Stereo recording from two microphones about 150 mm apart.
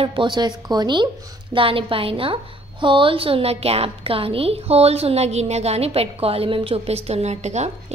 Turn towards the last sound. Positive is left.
turn(degrees=-50)  # may be behind; listen again after turning